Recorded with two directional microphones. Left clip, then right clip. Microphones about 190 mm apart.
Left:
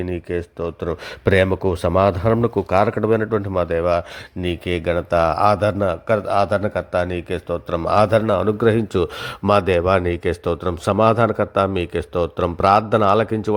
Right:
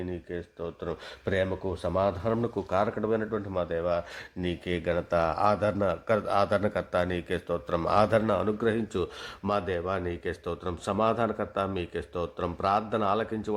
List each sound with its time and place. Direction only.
0.1 s speech: 30° left (ahead or behind)